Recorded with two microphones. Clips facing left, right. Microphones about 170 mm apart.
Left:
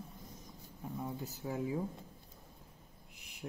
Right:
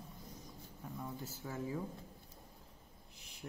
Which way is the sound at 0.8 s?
20° left (ahead or behind).